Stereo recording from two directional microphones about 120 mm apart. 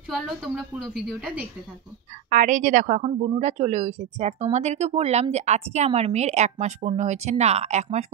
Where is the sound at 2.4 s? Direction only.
90° right; by 8.0 s 70° right (ahead or behind).